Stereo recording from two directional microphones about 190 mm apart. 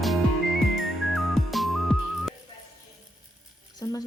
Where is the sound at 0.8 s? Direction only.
Centre (ahead or behind).